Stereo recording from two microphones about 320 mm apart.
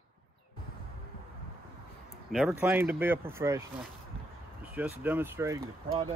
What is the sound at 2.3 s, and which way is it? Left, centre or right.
Speech, centre.